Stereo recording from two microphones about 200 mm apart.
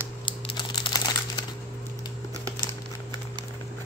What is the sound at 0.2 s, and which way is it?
Crumpling, 20° left (ahead or behind).